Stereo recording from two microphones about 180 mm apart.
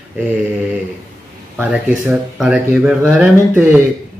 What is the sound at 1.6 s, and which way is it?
Speech, 5° right (ahead or behind).